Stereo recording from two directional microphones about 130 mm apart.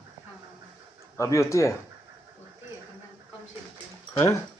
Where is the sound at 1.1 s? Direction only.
20° left (ahead or behind).